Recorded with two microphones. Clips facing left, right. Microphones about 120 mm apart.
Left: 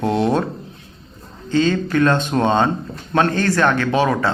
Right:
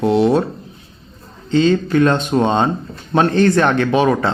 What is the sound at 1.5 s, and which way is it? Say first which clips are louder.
Speech: right 3 dB; 45° left (ahead or behind).